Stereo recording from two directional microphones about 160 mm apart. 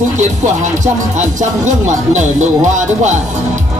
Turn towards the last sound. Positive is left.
turn(degrees=-50)  # may be behind; listen again after turning